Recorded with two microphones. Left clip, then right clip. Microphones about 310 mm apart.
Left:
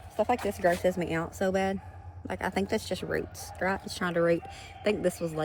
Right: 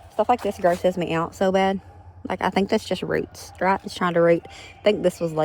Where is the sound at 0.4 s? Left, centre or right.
Right.